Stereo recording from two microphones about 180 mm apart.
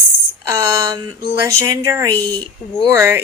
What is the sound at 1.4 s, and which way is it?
Speech, 15° right (ahead or behind).